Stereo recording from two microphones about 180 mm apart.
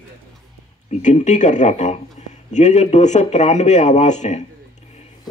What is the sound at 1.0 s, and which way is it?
Speech, 40° left (ahead or behind).